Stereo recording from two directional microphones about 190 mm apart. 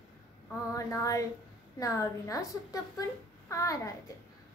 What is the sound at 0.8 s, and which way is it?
A woman's voice, 15° left (ahead or behind).